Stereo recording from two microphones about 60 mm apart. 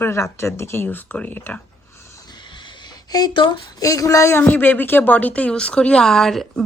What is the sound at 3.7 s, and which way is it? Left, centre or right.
Speech, left.